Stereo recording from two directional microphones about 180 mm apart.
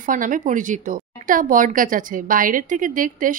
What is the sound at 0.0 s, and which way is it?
A woman's voice, 45° right (ahead or behind).